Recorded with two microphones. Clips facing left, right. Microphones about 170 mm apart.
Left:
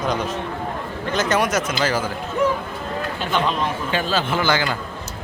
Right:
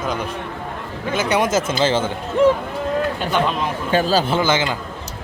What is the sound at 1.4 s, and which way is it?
Speech, 25° right (ahead or behind).